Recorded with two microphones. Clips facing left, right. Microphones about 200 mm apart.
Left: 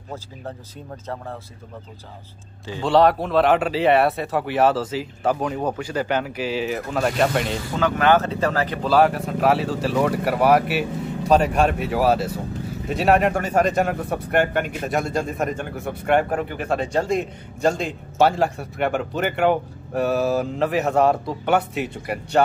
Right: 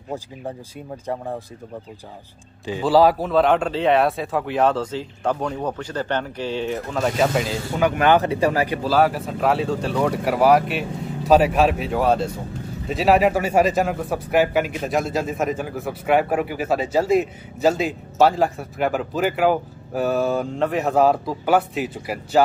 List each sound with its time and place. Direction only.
1.0 s speech: 15° right (ahead or behind)
2.8 s speech: 5° right (ahead or behind)
7.8 s speech: 15° right (ahead or behind)
8.8 s speech: centre (ahead or behind)